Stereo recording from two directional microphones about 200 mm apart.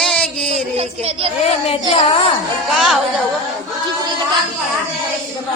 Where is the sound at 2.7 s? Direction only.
Centre (ahead or behind).